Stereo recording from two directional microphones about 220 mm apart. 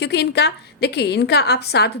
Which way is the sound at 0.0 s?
50° left (ahead or behind).